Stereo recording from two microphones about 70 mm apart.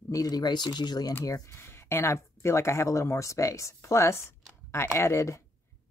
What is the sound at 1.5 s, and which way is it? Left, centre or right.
Speech, left.